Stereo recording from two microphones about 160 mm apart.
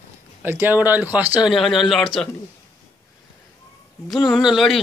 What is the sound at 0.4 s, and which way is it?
Speech, 10° right (ahead or behind).